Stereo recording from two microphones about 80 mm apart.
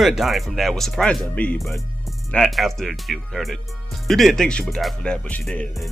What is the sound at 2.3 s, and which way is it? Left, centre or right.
Speech, centre.